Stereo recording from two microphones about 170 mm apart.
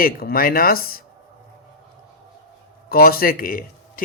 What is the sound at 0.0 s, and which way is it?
Speech, 60° left (ahead or behind).